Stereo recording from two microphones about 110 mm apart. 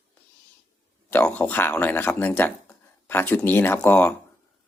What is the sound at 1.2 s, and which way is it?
Speech, 15° left (ahead or behind).